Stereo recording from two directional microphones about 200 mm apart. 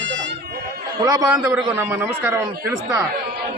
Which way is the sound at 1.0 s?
15° right (ahead or behind).